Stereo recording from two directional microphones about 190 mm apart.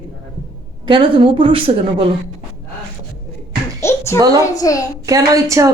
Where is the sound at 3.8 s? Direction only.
15° left (ahead or behind).